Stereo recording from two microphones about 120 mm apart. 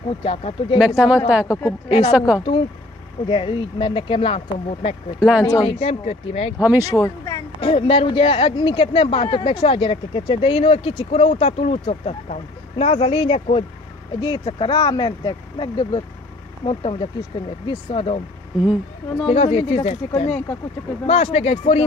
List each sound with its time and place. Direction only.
0.2 s speech: 60° left (ahead or behind)
0.7 s speech: 10° right (ahead or behind)
1.5 s a woman's voice: 25° left (ahead or behind)
2.1 s speech: 10° right (ahead or behind)
3.3 s speech: 50° left (ahead or behind)
5.4 s speech: 30° left (ahead or behind)
5.7 s speech: 60° left (ahead or behind)
6.6 s speech: 15° right (ahead or behind)
7.0 s a sound: 30° left (ahead or behind)
7.6 s speech: 55° left (ahead or behind)
14.2 s speech: 45° left (ahead or behind); by 20.2 s 60° left (ahead or behind)
20.2 s speech: 15° left (ahead or behind)
21.1 s speech: 65° left (ahead or behind)